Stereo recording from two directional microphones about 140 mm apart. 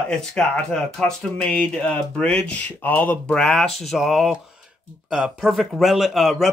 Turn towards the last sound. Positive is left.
turn(degrees=0)  # may be behind; listen again after turning